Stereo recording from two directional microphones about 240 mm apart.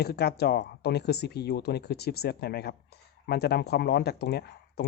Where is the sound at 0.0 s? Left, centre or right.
Left.